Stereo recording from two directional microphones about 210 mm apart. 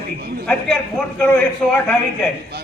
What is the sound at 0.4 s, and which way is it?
A man's voice, 5° left (ahead or behind).